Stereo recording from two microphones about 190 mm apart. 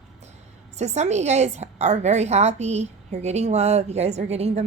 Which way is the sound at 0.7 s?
35° right (ahead or behind).